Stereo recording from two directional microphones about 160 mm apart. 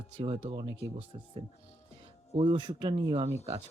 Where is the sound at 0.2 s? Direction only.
35° right (ahead or behind).